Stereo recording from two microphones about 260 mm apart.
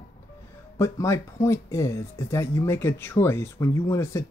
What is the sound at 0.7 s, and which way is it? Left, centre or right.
Speech, centre.